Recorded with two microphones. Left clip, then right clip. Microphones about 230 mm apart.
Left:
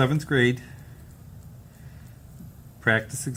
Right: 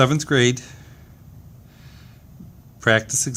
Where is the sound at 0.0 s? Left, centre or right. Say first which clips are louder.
Right 5 dB; right.